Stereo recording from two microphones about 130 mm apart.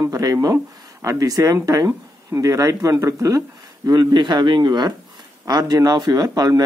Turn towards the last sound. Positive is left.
turn(degrees=-30)  # may be behind; listen again after turning